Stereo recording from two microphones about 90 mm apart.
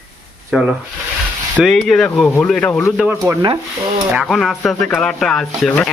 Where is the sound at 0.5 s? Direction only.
10° right (ahead or behind).